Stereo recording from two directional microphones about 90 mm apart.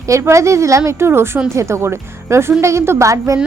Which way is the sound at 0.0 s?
35° right (ahead or behind).